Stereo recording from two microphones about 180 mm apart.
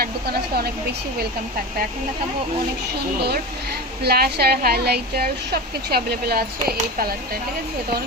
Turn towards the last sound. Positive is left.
turn(degrees=-55)  # may be behind; listen again after turning